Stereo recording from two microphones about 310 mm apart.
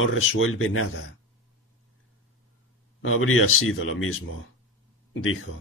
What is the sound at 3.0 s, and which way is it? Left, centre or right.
Speech, left.